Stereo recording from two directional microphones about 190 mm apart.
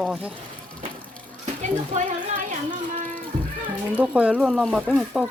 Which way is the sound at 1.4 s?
35° right (ahead or behind).